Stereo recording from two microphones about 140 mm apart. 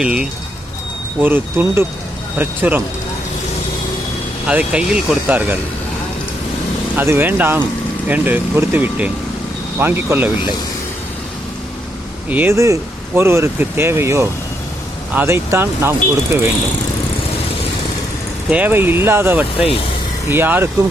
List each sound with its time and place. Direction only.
0.0 s speech: 5° right (ahead or behind)
4.4 s speech: 10° right (ahead or behind)
6.9 s speech: 15° right (ahead or behind)
12.3 s speech: 15° right (ahead or behind)
18.5 s speech: 15° right (ahead or behind)